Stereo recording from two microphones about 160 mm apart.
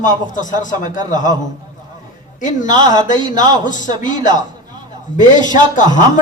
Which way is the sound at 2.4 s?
50° left (ahead or behind).